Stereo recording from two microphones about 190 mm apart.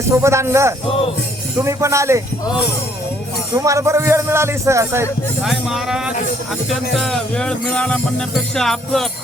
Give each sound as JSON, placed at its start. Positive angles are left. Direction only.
{"t": 0.1, "sound": "speech", "side_deg": -15}
{"t": 0.9, "sound": "music", "side_deg": 30}
{"t": 1.5, "sound": "speech", "side_deg": -15}
{"t": 3.5, "sound": "speech", "side_deg": -15}
{"t": 5.4, "sound": "music", "side_deg": 0}